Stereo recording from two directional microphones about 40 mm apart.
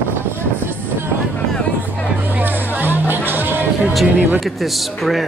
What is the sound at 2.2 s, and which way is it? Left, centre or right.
Music, right.